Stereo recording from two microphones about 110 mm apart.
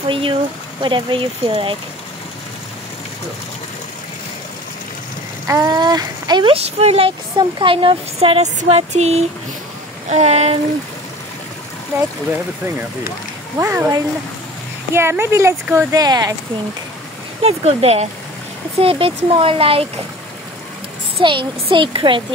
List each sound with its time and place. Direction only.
0.1 s speech: 50° right (ahead or behind)
5.5 s speech: 35° right (ahead or behind)
6.5 s speech: 70° right (ahead or behind)
13.6 s a woman's voice: 25° right (ahead or behind)
16.0 s speech: 35° right (ahead or behind)
17.4 s speech: 70° right (ahead or behind)
18.8 s speech: 60° right (ahead or behind)
21.2 s speech: 50° right (ahead or behind)